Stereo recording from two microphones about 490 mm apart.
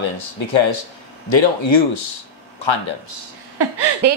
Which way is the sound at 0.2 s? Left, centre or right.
Left.